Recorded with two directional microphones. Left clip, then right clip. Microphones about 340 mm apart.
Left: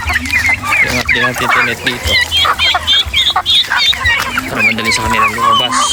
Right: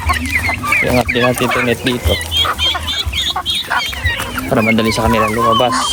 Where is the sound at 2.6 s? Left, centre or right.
Centre.